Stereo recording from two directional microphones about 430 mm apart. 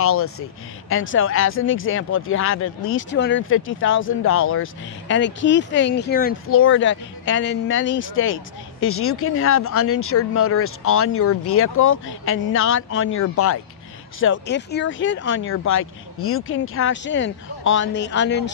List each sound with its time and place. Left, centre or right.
0.0 s speech: left